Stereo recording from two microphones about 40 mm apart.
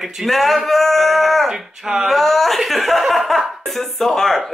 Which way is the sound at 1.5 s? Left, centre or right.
Centre.